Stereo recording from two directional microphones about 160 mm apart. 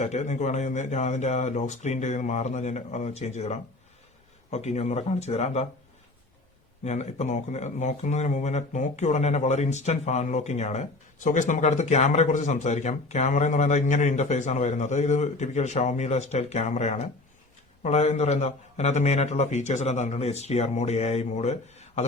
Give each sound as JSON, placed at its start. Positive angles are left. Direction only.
{"t": 0.0, "sound": "speech", "side_deg": 50}
{"t": 6.8, "sound": "speech", "side_deg": 45}